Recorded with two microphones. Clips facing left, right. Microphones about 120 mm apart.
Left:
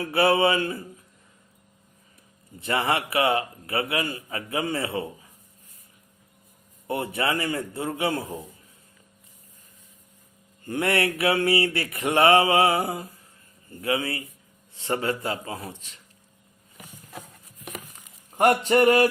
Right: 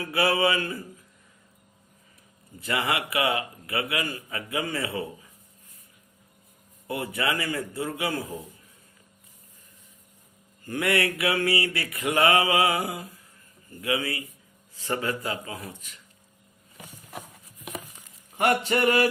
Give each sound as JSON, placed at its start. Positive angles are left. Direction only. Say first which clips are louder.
{"t": 0.0, "sound": "a man's voice", "louder": "left 3 dB", "side_deg": 25}
{"t": 2.6, "sound": "a man's voice", "louder": "left 3 dB", "side_deg": 30}
{"t": 6.8, "sound": "a man's voice", "louder": "left 2 dB", "side_deg": 25}
{"t": 10.7, "sound": "a man's voice", "louder": "left 1 dB", "side_deg": 25}
{"t": 18.3, "sound": "speech", "louder": "left 4 dB", "side_deg": 40}